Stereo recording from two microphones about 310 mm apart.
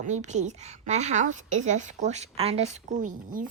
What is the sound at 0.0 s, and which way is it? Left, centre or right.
Speech, right.